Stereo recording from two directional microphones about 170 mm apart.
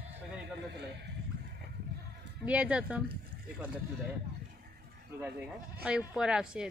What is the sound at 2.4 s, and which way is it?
Speech, 5° right (ahead or behind).